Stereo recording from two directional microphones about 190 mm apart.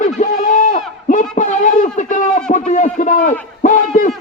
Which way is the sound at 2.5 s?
40° left (ahead or behind).